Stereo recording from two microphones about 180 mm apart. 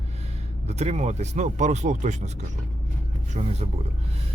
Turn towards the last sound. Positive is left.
turn(degrees=-35)  # may be behind; listen again after turning